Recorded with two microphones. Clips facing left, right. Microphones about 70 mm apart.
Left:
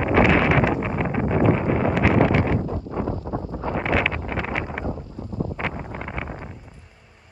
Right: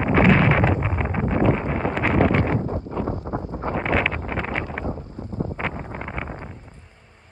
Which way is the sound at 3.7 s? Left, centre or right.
Centre.